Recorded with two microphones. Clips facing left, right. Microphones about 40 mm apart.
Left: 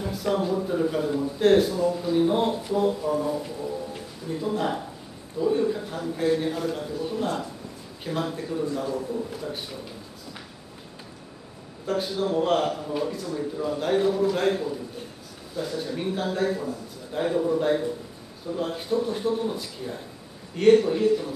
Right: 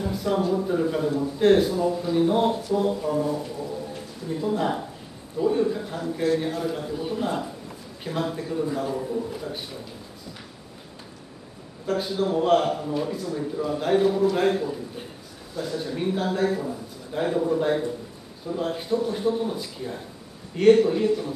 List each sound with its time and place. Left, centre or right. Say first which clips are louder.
0.0 s a sound: right 1 dB; centre
0.4 s a man's voice: right 1 dB; centre
4.4 s a man's voice: right 2 dB; centre
8.8 s a man's voice: right 1 dB; centre
9.4 s a man's voice: even; centre
11.8 s a man's voice: right 1 dB; centre